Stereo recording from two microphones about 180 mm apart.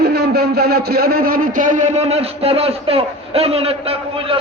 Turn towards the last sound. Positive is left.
turn(degrees=-30)  # may be behind; listen again after turning